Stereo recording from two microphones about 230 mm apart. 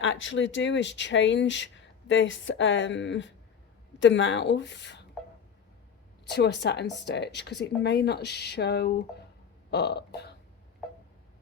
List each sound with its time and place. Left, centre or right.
0.0 s speech: left
6.2 s speech: left